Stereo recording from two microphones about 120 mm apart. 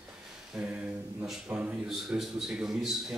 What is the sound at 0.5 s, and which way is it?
A man's voice, 15° right (ahead or behind).